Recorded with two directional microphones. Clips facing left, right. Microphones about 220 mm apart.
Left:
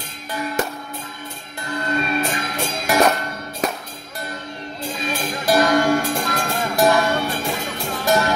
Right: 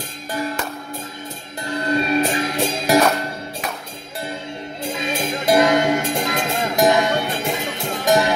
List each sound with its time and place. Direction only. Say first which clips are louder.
1.7 s music: right 3 dB; 30° right (ahead or behind)
4.8 s music: right 2 dB; 25° right (ahead or behind)